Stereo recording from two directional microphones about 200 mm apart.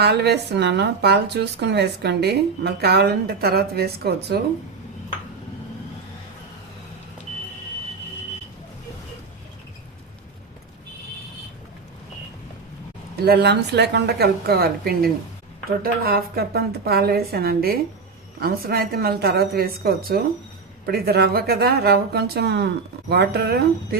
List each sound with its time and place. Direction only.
0.0 s speech: 55° right (ahead or behind)
13.2 s a woman's voice: 55° right (ahead or behind)